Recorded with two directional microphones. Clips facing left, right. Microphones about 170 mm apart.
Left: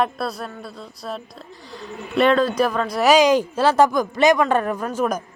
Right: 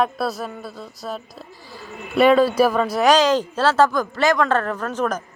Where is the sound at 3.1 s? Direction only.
10° left (ahead or behind).